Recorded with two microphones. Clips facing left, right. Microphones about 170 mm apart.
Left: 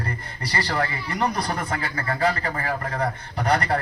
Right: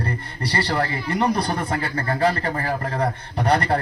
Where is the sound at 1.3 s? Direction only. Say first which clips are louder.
Right 3 dB; 30° right (ahead or behind).